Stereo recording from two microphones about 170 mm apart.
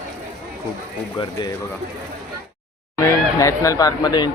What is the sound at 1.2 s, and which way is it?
Speech, 25° left (ahead or behind).